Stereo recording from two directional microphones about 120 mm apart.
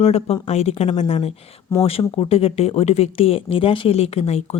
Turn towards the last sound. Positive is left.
turn(degrees=60)  # may be behind; listen again after turning